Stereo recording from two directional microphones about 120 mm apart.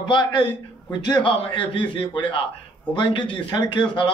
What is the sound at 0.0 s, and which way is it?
A man's voice, 40° left (ahead or behind).